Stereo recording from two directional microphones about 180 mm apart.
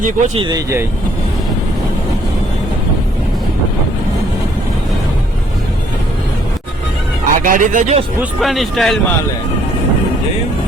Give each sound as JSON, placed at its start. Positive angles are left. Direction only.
{"t": 0.3, "sound": "speech", "side_deg": -25}
{"t": 7.3, "sound": "speech", "side_deg": -50}
{"t": 8.2, "sound": "speech", "side_deg": 0}